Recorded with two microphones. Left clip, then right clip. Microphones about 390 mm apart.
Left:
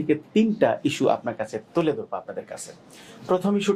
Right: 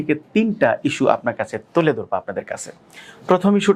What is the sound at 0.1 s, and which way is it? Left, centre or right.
Speech, right.